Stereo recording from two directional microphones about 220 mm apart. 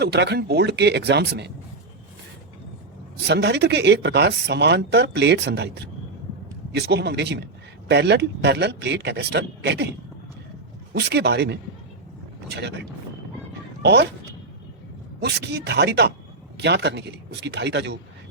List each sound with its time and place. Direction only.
0.0 s speech: 50° right (ahead or behind)
3.2 s speech: 50° right (ahead or behind)
10.9 s speech: 50° right (ahead or behind)
15.2 s speech: 50° right (ahead or behind)